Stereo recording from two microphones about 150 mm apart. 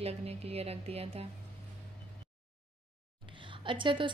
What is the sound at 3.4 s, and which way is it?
Speech, 35° right (ahead or behind).